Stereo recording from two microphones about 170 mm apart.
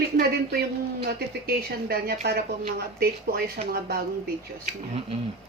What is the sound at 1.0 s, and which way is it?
Speech, 65° right (ahead or behind).